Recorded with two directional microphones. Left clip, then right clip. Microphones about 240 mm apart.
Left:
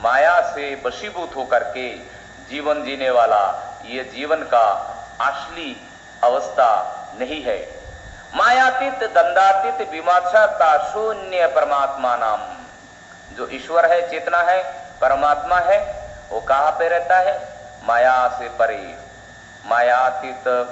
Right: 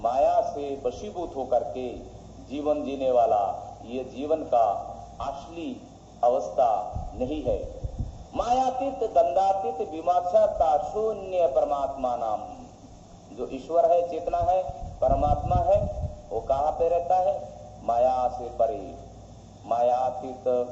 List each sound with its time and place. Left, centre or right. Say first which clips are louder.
0.0 s a man's voice: left 8 dB; left
13.4 s a man's voice: left 6 dB; left
19.9 s a man's voice: left 9 dB; left